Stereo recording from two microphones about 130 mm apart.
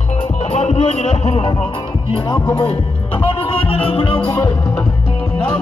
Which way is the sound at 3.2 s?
45° left (ahead or behind).